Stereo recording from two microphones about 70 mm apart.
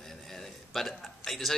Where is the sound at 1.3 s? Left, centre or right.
Centre.